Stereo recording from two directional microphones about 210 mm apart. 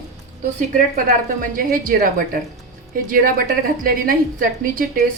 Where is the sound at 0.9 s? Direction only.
40° right (ahead or behind).